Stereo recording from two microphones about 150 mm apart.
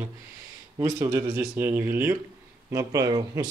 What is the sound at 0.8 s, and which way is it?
A man's voice, 25° right (ahead or behind).